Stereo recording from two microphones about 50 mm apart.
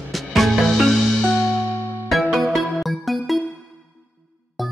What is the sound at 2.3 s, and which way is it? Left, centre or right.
Music, centre.